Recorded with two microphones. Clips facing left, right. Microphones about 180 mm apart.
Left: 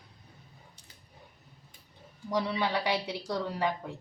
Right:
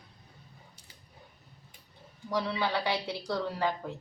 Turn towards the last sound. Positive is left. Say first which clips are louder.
# even
turn(degrees=20)  # may be behind; listen again after turning